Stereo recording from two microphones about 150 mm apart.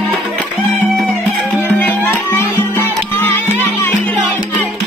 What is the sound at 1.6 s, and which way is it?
Music, 10° left (ahead or behind).